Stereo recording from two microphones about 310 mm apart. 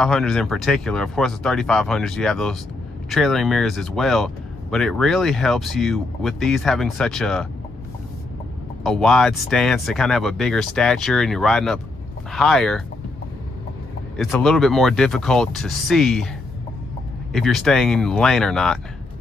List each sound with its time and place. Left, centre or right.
0.0 s speech: centre
8.8 s speech: centre
14.1 s speech: centre
17.3 s speech: centre